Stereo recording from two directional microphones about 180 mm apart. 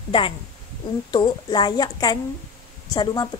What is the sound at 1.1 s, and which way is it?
A woman's voice, 25° left (ahead or behind).